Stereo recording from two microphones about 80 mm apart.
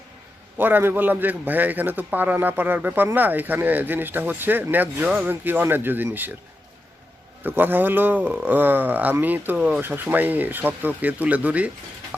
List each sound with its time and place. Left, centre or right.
0.5 s a man's voice: right
7.4 s a man's voice: right